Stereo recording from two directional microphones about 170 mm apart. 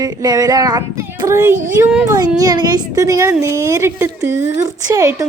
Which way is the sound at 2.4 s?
25° right (ahead or behind).